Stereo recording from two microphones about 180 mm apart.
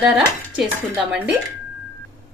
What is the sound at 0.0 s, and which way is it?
Dishes, 5° right (ahead or behind).